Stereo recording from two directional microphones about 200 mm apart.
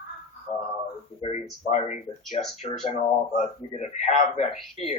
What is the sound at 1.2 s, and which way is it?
Speech, 35° left (ahead or behind).